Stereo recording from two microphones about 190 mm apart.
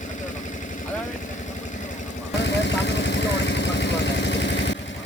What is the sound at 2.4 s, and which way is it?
Vehicle, 70° left (ahead or behind).